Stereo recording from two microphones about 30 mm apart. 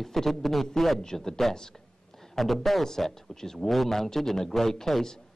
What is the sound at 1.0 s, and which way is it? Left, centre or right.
Speech, centre.